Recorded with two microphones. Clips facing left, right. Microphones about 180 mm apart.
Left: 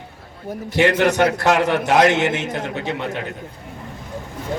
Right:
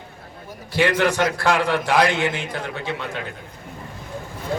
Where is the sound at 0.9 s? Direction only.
20° left (ahead or behind).